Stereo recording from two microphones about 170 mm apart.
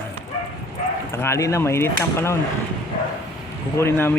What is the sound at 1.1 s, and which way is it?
Speech, 15° left (ahead or behind).